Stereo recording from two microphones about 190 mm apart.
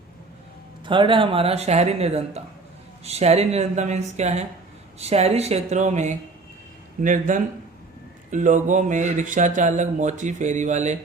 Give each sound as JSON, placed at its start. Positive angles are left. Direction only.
{"t": 0.9, "sound": "speech", "side_deg": -25}